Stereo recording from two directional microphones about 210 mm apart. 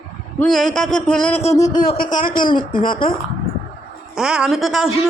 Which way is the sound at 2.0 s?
40° left (ahead or behind).